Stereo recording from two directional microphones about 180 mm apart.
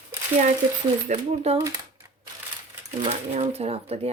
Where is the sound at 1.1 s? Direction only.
35° right (ahead or behind).